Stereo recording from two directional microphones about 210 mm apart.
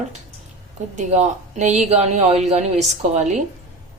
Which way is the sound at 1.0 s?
35° right (ahead or behind).